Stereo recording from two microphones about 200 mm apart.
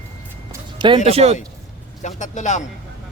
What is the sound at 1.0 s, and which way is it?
Speech, 30° right (ahead or behind).